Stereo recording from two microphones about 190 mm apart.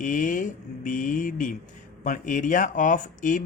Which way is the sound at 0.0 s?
45° left (ahead or behind).